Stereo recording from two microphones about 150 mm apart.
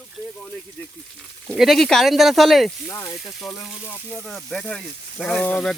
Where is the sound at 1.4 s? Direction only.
Centre (ahead or behind).